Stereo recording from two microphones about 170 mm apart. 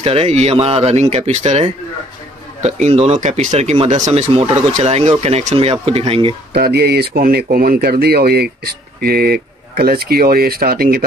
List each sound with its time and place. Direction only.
0.0 s speech: 35° right (ahead or behind)
6.5 s speech: 70° right (ahead or behind)